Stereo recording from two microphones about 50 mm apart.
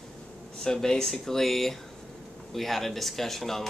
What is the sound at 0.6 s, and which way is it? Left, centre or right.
Speech, centre.